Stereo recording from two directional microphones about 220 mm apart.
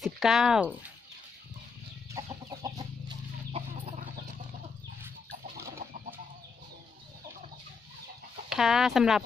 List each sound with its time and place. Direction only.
0.0 s speech: centre (ahead or behind)
2.2 s chicken: 15° right (ahead or behind)
8.4 s speech: centre (ahead or behind)